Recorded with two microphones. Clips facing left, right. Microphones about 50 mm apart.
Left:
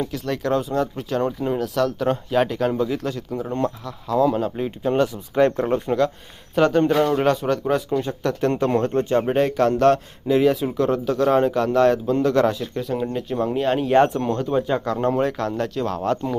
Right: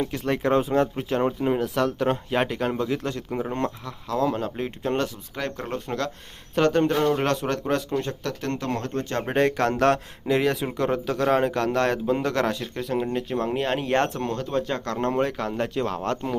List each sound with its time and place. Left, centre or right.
0.0 s speech: centre
3.2 s speech: right
3.5 s speech: centre
8.2 s speech: left
9.2 s speech: centre
14.9 s speech: centre